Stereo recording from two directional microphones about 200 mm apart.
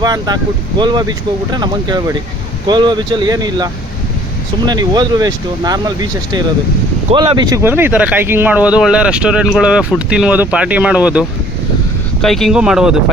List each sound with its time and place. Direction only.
0.0 s speech: 20° right (ahead or behind); by 13.0 s 5° right (ahead or behind)